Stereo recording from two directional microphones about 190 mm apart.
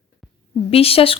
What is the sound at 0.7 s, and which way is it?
Speech, 30° left (ahead or behind).